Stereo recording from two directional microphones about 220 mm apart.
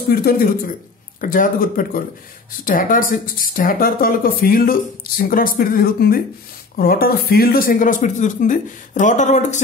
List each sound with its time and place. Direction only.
0.1 s speech: 45° left (ahead or behind)